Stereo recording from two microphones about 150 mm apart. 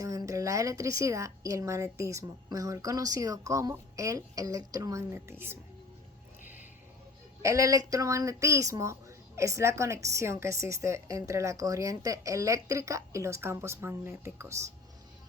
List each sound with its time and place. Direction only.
0.0 s a woman's voice: 20° right (ahead or behind)
7.4 s a woman's voice: 20° right (ahead or behind)